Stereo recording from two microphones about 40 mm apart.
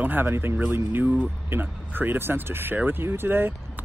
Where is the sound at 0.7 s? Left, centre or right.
Right.